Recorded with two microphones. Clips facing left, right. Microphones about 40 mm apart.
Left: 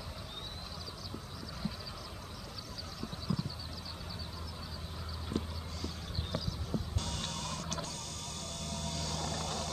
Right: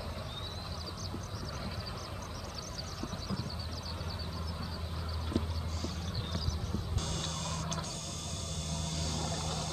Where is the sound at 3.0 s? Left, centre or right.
Centre.